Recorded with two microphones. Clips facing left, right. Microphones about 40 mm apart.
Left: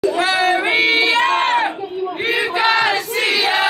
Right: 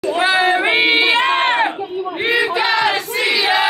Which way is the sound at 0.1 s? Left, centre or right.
Centre.